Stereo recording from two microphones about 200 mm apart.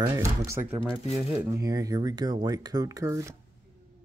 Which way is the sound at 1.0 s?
30° left (ahead or behind).